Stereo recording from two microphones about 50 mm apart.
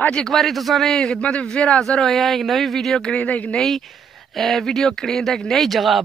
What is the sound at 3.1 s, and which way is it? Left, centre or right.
Speech, left.